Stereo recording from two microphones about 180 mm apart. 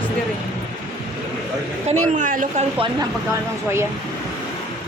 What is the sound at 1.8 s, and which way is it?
Speech, 45° right (ahead or behind).